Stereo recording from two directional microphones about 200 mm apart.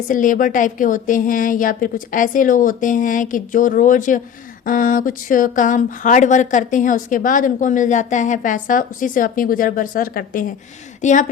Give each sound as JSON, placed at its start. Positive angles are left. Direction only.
{"t": 0.1, "sound": "speech", "side_deg": 40}